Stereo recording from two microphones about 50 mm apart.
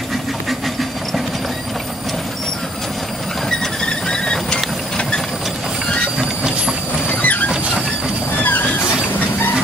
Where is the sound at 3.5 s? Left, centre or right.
Centre.